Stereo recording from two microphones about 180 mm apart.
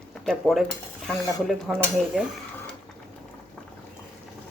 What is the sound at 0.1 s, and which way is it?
Speech, centre (ahead or behind).